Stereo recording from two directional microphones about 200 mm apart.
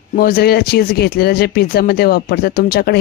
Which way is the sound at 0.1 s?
45° left (ahead or behind).